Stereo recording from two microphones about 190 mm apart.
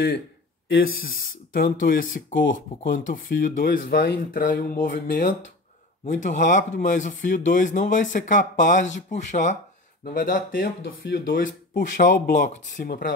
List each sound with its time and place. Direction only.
1.5 s speech: 50° left (ahead or behind)